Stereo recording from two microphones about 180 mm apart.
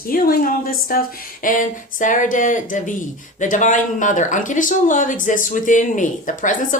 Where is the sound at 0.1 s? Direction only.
55° left (ahead or behind).